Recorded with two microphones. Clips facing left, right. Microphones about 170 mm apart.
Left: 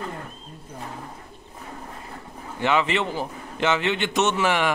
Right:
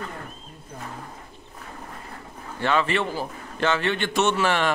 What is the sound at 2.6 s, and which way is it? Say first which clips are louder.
A man's voice: left 1 dB; 15° left (ahead or behind).